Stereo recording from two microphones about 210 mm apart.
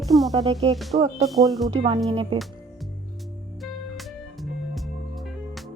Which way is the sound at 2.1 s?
25° right (ahead or behind).